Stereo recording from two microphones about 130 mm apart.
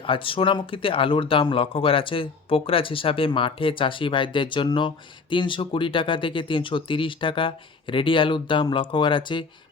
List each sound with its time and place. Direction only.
0.0 s speech: 40° left (ahead or behind)